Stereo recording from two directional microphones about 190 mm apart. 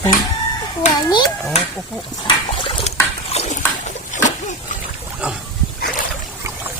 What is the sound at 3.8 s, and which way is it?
Dog, 40° left (ahead or behind).